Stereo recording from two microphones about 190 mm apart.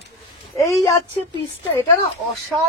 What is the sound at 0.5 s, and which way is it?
Speech, 15° left (ahead or behind).